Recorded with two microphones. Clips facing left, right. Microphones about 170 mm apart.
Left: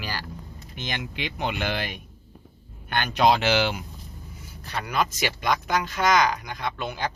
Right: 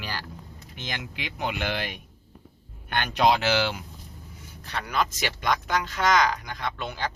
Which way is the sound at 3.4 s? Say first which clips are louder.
Left 2 dB; 20° left (ahead or behind).